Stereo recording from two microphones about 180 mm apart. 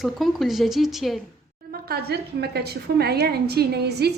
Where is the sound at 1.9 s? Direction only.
60° right (ahead or behind).